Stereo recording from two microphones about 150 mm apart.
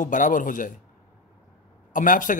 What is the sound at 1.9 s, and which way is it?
Speech, 60° left (ahead or behind).